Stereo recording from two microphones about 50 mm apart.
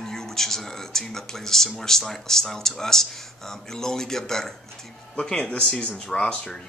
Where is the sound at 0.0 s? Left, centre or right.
Centre.